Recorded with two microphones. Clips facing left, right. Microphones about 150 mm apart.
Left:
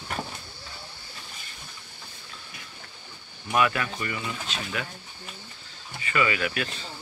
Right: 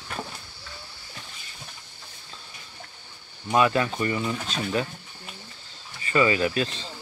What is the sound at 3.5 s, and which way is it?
Speech, 25° right (ahead or behind).